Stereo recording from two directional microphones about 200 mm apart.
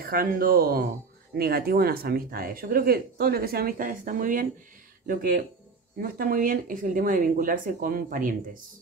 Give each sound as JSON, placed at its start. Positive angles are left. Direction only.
{"t": 0.0, "sound": "speech", "side_deg": -45}